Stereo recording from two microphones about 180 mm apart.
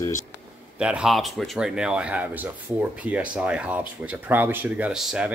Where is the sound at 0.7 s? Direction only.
5° right (ahead or behind).